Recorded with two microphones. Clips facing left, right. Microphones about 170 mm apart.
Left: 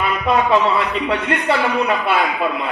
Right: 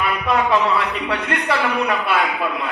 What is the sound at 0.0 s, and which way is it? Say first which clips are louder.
A man's voice: left 2 dB; 25° left (ahead or behind).